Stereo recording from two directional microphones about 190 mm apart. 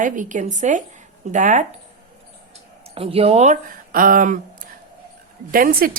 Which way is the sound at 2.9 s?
30° right (ahead or behind).